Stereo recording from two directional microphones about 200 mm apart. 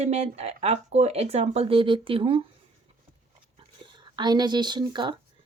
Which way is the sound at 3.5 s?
25° right (ahead or behind).